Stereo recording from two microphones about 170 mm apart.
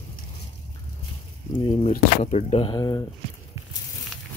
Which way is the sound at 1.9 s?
35° left (ahead or behind).